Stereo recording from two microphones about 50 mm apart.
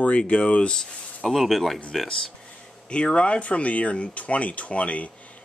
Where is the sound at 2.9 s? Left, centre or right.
Left.